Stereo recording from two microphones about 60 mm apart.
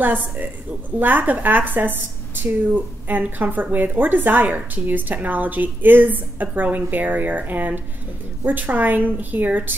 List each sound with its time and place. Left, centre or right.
0.0 s a woman's voice: right